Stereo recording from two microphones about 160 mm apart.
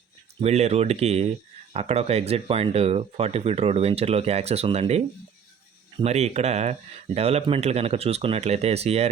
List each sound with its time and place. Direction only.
0.4 s speech: 40° right (ahead or behind)